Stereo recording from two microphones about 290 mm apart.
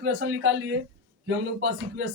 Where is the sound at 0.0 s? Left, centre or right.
Right.